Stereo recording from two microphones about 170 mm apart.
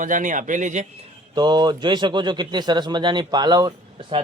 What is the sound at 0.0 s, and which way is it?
Speech, 50° right (ahead or behind).